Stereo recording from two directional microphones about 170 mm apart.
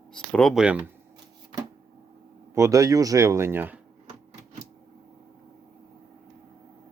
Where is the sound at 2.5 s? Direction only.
20° right (ahead or behind).